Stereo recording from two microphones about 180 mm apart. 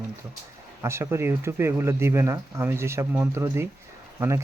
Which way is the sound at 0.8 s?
15° right (ahead or behind).